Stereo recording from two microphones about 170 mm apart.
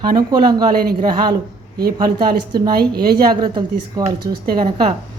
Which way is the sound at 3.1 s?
25° right (ahead or behind).